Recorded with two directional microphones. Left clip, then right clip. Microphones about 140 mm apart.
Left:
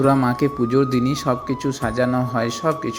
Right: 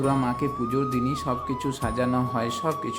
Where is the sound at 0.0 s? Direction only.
30° left (ahead or behind).